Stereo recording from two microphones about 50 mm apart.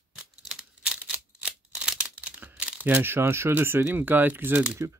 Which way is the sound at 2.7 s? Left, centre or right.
Right.